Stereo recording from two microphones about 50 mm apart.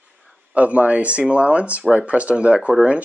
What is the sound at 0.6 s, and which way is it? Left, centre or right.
Speech, right.